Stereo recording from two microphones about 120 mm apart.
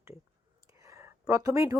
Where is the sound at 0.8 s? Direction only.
25° right (ahead or behind).